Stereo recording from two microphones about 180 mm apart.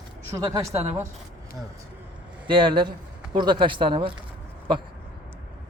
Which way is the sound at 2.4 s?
25° right (ahead or behind).